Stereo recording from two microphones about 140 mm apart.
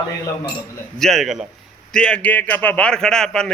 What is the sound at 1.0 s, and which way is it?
A man's voice, centre (ahead or behind).